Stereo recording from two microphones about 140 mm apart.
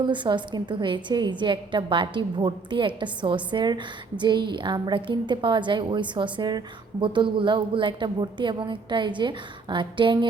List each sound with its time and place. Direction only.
0.0 s a woman's voice: 35° right (ahead or behind)